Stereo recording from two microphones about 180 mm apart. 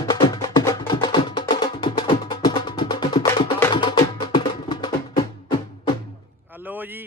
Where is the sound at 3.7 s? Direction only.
25° left (ahead or behind).